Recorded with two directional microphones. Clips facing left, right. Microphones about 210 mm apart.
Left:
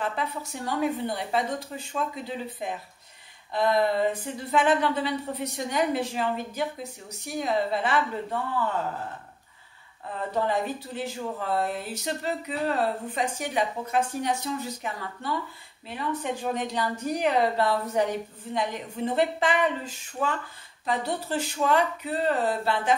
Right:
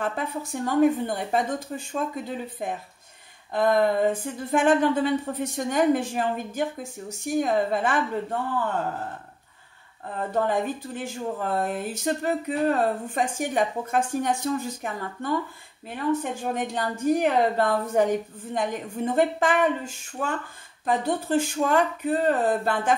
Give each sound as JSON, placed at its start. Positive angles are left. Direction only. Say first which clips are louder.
{"t": 0.0, "sound": "speech", "louder": "right 2 dB", "side_deg": -50}
{"t": 10.4, "sound": "speech", "louder": "right 2 dB", "side_deg": -50}
{"t": 16.5, "sound": "speech", "louder": "right 1 dB", "side_deg": -50}